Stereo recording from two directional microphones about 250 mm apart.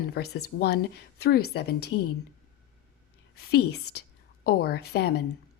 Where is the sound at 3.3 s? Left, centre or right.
Left.